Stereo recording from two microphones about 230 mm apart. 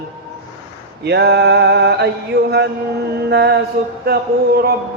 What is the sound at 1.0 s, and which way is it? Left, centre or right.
Mantra, right.